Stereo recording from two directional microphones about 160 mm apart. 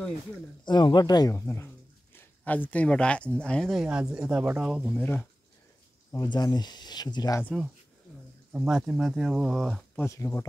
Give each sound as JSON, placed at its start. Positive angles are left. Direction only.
{"t": 0.7, "sound": "speech", "side_deg": 30}
{"t": 4.9, "sound": "speech", "side_deg": 10}
{"t": 6.3, "sound": "speech", "side_deg": 25}
{"t": 8.5, "sound": "speech", "side_deg": -5}
{"t": 9.9, "sound": "speech", "side_deg": 15}